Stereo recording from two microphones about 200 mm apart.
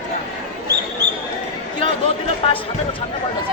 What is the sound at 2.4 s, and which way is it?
Speech, 30° left (ahead or behind).